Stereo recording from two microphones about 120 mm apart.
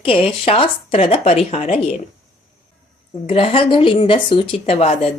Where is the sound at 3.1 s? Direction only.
50° left (ahead or behind).